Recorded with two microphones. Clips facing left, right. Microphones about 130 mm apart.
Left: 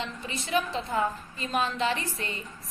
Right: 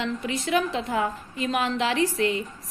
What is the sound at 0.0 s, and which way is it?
A woman's voice, 90° right.